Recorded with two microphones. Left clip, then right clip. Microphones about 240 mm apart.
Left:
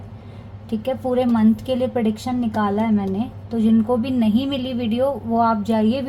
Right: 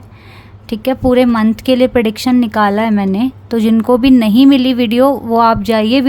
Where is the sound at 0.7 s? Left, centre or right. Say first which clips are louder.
Right 9 dB; right.